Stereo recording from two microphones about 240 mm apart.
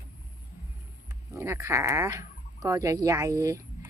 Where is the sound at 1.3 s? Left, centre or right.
Centre.